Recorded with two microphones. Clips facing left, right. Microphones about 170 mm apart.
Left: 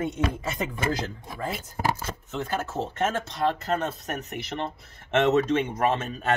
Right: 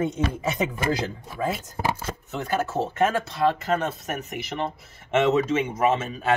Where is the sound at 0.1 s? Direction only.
20° right (ahead or behind).